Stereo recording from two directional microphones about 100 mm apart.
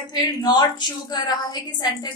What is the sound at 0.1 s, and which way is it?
A woman's voice, 45° left (ahead or behind).